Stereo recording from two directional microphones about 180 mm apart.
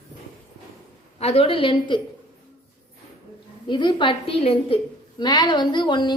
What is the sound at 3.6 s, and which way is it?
A woman's voice, 25° left (ahead or behind).